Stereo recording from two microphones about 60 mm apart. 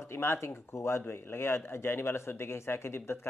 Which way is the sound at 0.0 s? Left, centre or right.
Left.